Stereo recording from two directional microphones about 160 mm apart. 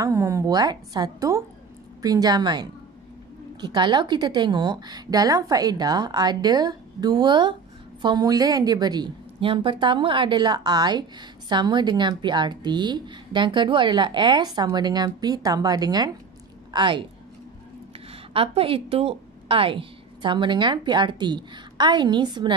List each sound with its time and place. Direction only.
0.0 s a woman's voice: 20° right (ahead or behind)
18.3 s a woman's voice: 35° right (ahead or behind)